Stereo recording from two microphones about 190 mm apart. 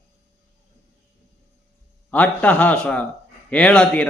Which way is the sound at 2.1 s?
10° left (ahead or behind).